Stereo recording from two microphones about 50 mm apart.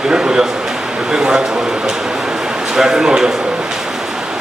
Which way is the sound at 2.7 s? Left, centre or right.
Centre.